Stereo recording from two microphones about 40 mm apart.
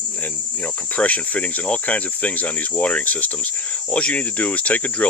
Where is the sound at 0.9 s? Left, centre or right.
Left.